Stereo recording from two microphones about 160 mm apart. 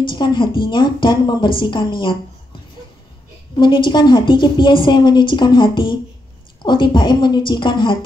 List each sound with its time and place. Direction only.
0.0 s a woman's voice: 30° left (ahead or behind)
3.5 s a woman's voice: 30° left (ahead or behind)